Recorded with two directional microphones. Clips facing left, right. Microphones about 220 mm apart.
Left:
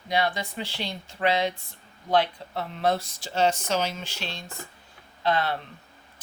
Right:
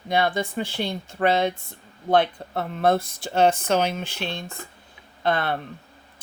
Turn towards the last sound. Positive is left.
turn(degrees=-55)  # may be behind; listen again after turning